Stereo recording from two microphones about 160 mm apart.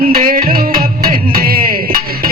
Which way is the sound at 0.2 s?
65° right (ahead or behind).